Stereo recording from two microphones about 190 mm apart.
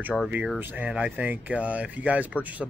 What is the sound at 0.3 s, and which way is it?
Speech, 5° right (ahead or behind).